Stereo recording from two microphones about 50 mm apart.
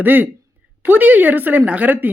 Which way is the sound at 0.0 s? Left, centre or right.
Right.